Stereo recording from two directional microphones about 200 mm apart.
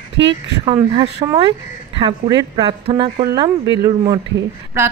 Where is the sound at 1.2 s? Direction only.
20° right (ahead or behind).